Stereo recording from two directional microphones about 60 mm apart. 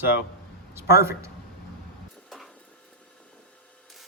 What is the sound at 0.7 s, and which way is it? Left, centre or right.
Speech, right.